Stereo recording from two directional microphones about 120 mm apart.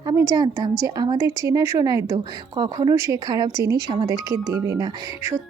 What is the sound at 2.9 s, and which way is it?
A woman's voice, 25° right (ahead or behind).